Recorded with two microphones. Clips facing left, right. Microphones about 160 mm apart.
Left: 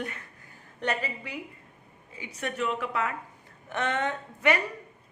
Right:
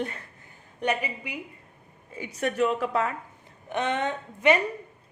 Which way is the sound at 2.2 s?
40° right (ahead or behind).